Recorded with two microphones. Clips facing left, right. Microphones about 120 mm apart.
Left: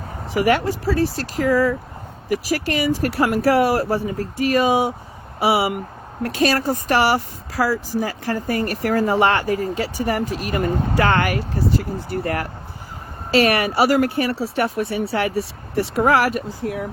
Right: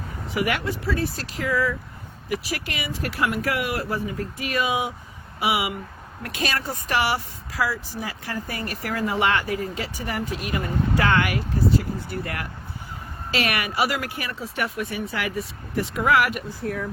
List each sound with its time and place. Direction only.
0.3 s speech: 35° left (ahead or behind)
16.6 s speech: 20° left (ahead or behind)